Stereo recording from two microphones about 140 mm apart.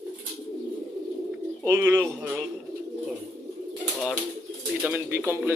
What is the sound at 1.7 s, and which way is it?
Speech, 15° right (ahead or behind).